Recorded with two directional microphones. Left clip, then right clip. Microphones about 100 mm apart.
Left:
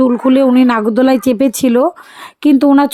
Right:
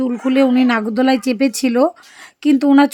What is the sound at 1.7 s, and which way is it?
Speech, 15° left (ahead or behind).